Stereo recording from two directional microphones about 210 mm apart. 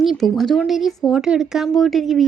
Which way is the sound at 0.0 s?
Centre (ahead or behind).